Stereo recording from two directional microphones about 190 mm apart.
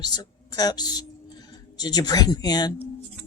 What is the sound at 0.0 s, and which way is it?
Speech, 20° left (ahead or behind).